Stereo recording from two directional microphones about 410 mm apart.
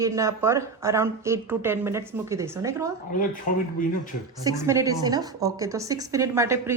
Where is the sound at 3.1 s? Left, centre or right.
Centre.